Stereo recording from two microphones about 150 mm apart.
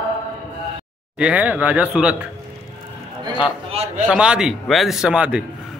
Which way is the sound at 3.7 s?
45° right (ahead or behind).